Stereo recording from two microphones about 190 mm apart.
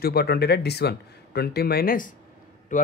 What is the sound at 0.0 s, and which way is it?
Speech, 55° left (ahead or behind).